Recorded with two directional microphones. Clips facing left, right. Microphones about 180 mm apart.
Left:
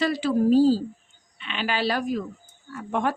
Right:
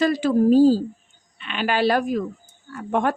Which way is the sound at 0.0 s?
45° right (ahead or behind).